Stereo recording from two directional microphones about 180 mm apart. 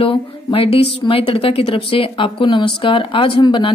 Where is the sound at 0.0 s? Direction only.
30° left (ahead or behind).